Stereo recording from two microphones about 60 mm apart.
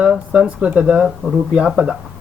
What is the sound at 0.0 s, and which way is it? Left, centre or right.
Speech, centre.